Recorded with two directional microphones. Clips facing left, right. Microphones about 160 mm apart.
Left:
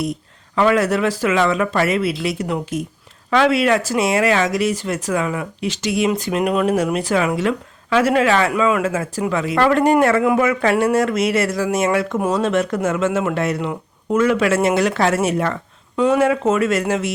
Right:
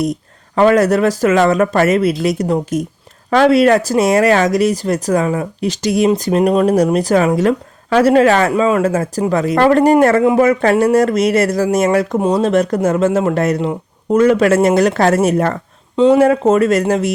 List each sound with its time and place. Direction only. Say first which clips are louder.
0.0 s speech: right 5 dB; 40° right (ahead or behind)
16.0 s speech: right 6 dB; 30° right (ahead or behind)